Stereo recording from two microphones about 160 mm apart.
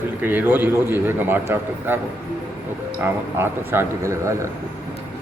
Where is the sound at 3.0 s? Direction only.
15° right (ahead or behind).